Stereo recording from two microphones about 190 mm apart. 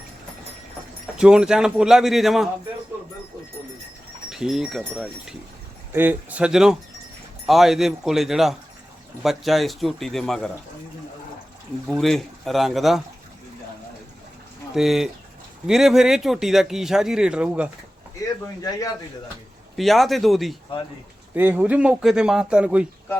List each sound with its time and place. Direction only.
1.2 s speech: 5° right (ahead or behind)
4.3 s speech: centre (ahead or behind)
5.9 s speech: 10° right (ahead or behind)
11.9 s speech: centre (ahead or behind)
14.8 s speech: centre (ahead or behind)
18.7 s speech: 20° left (ahead or behind)
19.7 s speech: centre (ahead or behind)